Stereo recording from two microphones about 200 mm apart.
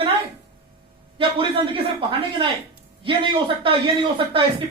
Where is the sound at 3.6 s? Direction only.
25° right (ahead or behind).